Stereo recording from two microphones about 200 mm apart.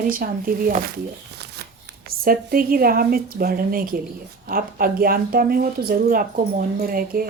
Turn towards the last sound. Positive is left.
turn(degrees=-45)  # may be behind; listen again after turning